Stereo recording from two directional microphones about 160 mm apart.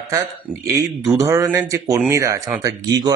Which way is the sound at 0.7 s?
20° right (ahead or behind).